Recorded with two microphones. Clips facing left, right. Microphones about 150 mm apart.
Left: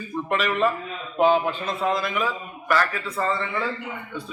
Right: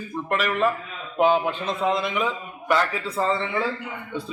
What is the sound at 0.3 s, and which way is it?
A man's voice, 10° right (ahead or behind).